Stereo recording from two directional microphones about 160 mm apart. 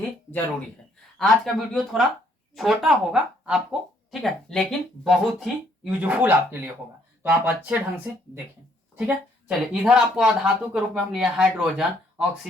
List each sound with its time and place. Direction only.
1.2 s speech: centre (ahead or behind)